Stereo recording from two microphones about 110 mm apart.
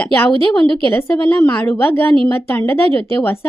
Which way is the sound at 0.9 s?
20° left (ahead or behind).